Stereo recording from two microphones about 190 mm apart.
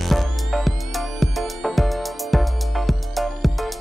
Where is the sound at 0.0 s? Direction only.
Centre (ahead or behind).